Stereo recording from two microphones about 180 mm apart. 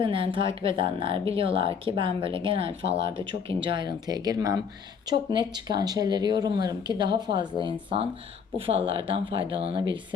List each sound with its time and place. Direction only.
0.0 s speech: 30° right (ahead or behind)